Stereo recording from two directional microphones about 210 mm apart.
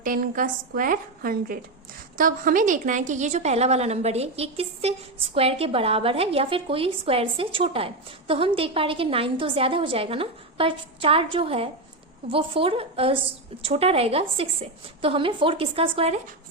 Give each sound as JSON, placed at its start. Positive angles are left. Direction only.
{"t": 0.0, "sound": "a woman's voice", "side_deg": -40}